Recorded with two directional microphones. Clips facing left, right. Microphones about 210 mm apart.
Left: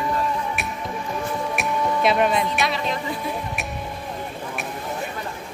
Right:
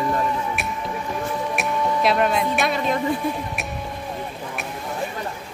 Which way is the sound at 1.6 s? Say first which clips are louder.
Even; centre (ahead or behind).